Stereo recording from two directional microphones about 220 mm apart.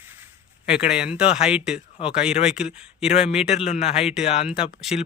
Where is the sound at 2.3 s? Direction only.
30° left (ahead or behind).